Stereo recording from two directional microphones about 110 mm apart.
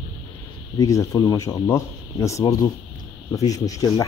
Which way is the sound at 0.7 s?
30° left (ahead or behind).